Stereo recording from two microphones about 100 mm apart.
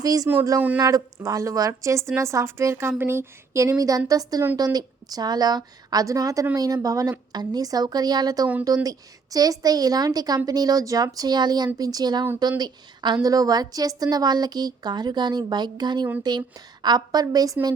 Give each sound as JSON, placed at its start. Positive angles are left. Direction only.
{"t": 0.0, "sound": "a woman's voice", "side_deg": -35}